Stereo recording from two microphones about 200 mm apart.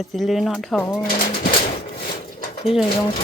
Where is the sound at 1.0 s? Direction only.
45° left (ahead or behind).